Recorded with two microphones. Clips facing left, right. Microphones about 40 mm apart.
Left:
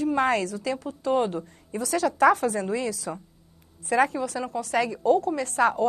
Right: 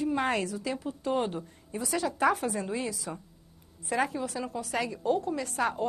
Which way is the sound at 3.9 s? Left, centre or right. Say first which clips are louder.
Left 6 dB; left.